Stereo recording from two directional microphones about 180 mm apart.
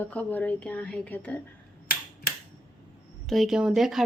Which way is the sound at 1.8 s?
55° left (ahead or behind).